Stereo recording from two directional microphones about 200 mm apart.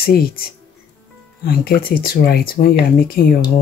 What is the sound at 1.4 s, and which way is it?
Speech, 50° left (ahead or behind).